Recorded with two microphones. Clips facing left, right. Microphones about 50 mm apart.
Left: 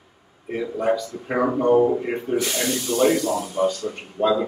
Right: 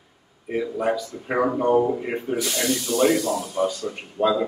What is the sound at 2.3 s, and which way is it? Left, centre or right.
Speech, left.